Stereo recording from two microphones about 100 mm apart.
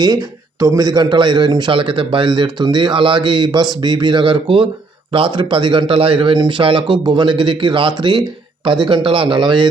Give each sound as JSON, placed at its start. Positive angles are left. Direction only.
{"t": 0.0, "sound": "a man's voice", "side_deg": -40}